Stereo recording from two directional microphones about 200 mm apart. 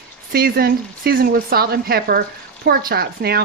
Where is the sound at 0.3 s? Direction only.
50° right (ahead or behind).